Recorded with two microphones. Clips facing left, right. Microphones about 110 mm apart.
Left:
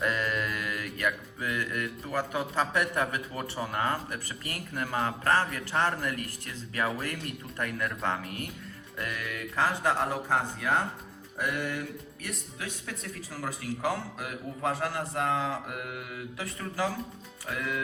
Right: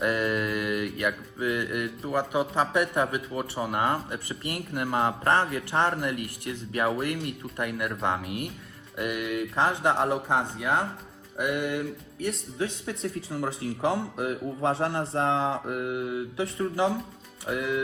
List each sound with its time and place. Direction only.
0.0 s music: 15° right (ahead or behind)
1.5 s speech: 15° right (ahead or behind)